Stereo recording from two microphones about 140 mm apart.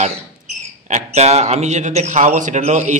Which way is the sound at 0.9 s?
50° right (ahead or behind).